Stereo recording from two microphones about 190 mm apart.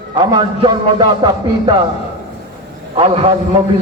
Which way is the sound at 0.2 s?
25° right (ahead or behind).